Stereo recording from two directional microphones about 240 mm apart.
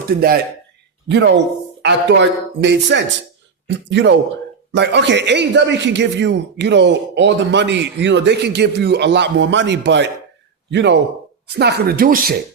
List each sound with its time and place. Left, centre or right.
1.0 s a man's voice: right